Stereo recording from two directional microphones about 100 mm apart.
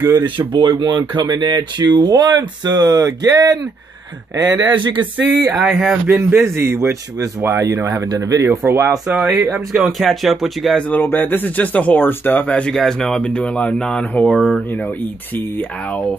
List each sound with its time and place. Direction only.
0.2 s speech: 55° right (ahead or behind)
4.7 s speech: 55° right (ahead or behind)
5.6 s speech: 5° right (ahead or behind)
6.0 s speech: 25° right (ahead or behind)
9.0 s speech: 15° right (ahead or behind)
9.7 s speech: centre (ahead or behind)
10.9 s speech: 20° left (ahead or behind)